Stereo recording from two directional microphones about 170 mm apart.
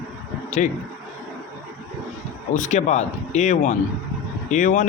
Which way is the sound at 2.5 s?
45° left (ahead or behind).